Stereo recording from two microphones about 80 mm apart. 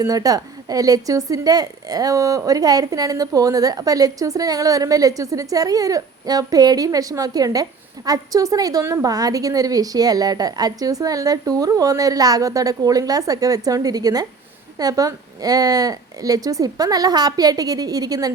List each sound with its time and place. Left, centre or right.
0.0 s a woman's voice: right